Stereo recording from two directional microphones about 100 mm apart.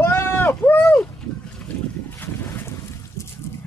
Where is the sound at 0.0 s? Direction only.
25° left (ahead or behind).